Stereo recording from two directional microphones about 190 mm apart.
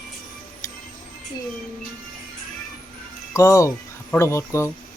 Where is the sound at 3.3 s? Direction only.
15° left (ahead or behind).